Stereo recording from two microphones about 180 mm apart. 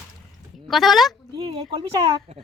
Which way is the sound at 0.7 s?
Centre (ahead or behind).